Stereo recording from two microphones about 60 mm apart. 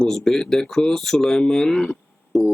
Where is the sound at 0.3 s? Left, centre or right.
Centre.